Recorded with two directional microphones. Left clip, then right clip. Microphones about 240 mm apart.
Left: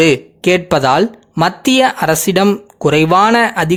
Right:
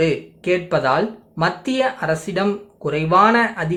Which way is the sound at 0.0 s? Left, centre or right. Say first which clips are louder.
Left 8 dB; left.